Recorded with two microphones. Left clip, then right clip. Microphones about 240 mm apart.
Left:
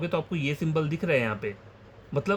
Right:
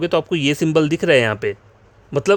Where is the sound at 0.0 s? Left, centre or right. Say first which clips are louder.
Right 11 dB; right.